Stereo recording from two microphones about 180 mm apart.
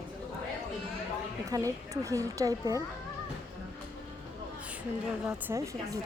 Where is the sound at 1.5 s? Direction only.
20° right (ahead or behind).